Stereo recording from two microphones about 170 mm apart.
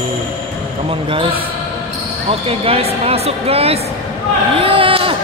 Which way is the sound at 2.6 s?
35° right (ahead or behind).